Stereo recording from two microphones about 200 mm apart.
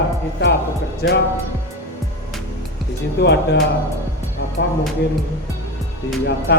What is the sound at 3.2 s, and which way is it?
Speech, 55° left (ahead or behind).